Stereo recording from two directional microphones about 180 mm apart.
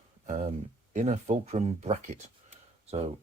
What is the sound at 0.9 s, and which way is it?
Speech, 40° right (ahead or behind).